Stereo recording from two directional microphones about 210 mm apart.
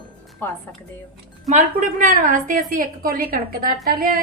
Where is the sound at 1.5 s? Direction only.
35° right (ahead or behind).